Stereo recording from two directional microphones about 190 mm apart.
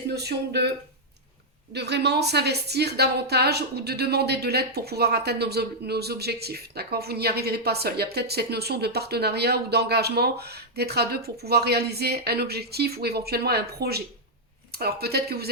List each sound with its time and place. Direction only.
0.1 s a woman's voice: 60° right (ahead or behind)
1.7 s a woman's voice: 60° right (ahead or behind)